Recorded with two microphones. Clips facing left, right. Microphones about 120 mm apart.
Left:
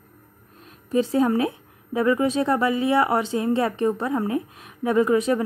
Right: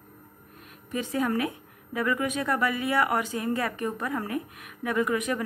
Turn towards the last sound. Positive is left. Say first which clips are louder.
# left 7 dB
turn(degrees=30)  # may be behind; listen again after turning